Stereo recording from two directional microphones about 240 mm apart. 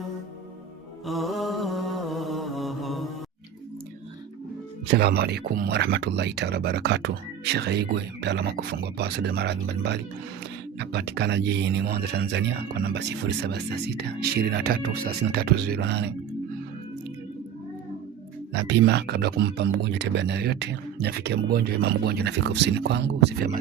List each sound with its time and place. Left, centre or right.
1.0 s mantra: centre
4.9 s speech: right
18.5 s speech: right